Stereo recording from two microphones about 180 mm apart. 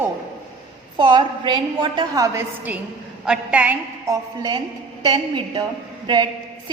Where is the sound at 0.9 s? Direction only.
25° right (ahead or behind).